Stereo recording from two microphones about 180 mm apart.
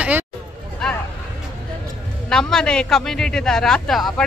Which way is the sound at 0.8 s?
5° left (ahead or behind).